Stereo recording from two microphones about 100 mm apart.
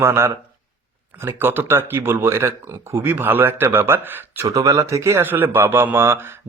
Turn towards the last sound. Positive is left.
turn(degrees=-25)  # may be behind; listen again after turning